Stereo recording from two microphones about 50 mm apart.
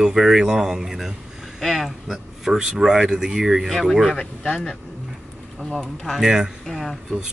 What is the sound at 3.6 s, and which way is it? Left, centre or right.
Speech, centre.